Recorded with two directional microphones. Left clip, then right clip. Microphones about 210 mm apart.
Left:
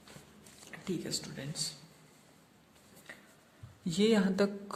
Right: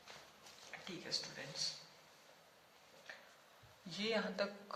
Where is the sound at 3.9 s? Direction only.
55° left (ahead or behind).